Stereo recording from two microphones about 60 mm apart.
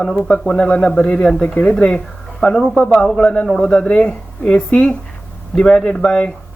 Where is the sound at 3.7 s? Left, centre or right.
Centre.